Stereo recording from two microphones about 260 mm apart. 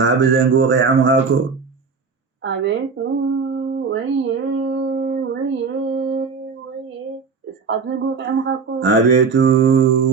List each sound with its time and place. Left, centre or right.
0.0 s speech: right
4.9 s female singing: right
6.0 s a sound: right
7.7 s speech: right